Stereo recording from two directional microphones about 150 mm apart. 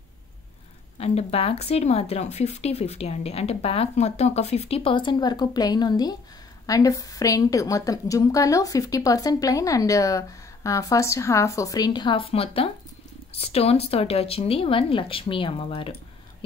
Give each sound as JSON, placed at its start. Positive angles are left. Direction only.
{"t": 0.9, "sound": "a woman's voice", "side_deg": 45}